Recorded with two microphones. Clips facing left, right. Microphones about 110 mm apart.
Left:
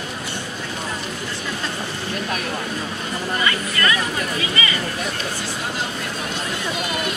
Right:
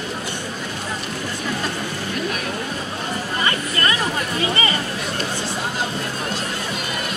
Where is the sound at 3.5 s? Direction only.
35° right (ahead or behind).